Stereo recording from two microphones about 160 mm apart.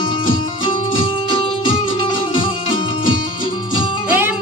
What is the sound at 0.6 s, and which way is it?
Music, 30° left (ahead or behind).